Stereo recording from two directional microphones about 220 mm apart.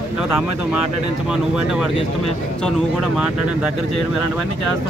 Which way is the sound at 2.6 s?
Centre (ahead or behind).